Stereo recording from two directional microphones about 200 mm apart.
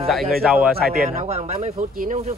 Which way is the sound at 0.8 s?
50° right (ahead or behind).